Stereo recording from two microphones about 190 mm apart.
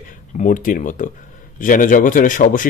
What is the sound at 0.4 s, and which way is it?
Speech, 45° left (ahead or behind).